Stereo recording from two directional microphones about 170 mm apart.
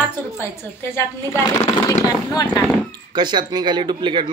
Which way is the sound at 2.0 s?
20° left (ahead or behind).